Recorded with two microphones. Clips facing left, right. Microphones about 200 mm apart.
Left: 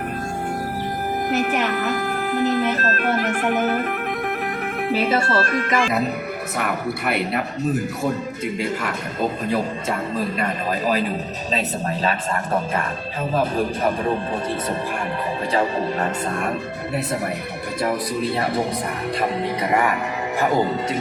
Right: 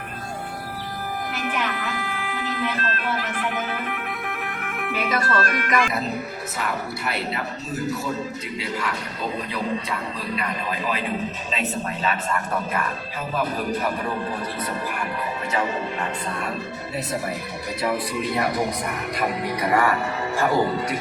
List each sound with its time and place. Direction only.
1.3 s music: 45° left (ahead or behind)
4.8 s speech: 30° left (ahead or behind)
6.6 s a man's voice: 60° left (ahead or behind); by 14.2 s 25° left (ahead or behind)
15.5 s speech: 40° left (ahead or behind)
17.8 s speech: 30° left (ahead or behind)